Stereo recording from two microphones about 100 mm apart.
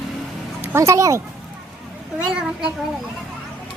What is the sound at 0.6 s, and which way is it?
Speech, 30° right (ahead or behind).